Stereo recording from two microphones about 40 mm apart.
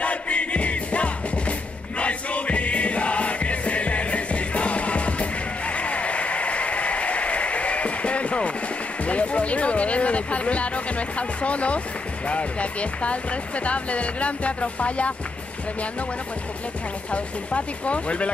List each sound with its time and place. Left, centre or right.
0.0 s music: left
12.3 s speech: left
17.1 s speech: left